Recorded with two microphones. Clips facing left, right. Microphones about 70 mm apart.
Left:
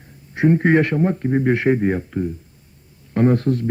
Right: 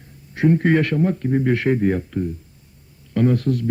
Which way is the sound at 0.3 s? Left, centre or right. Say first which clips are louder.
Left 2 dB; left.